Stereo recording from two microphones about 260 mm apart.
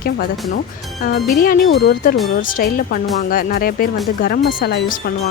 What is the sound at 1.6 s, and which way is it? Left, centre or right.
Speech, left.